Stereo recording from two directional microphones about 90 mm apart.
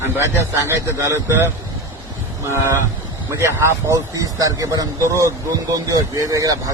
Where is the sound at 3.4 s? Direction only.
30° right (ahead or behind).